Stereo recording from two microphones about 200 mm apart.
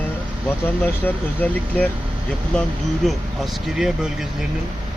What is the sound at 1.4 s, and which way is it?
Speech, 10° left (ahead or behind).